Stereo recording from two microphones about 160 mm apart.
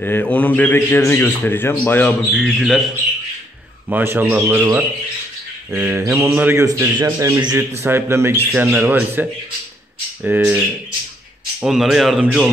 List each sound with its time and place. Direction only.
0.0 s a man's voice: 10° left (ahead or behind)
2.3 s speech: centre (ahead or behind)
3.9 s a man's voice: 10° right (ahead or behind)
5.7 s a man's voice: 15° right (ahead or behind)
11.6 s speech: 5° right (ahead or behind)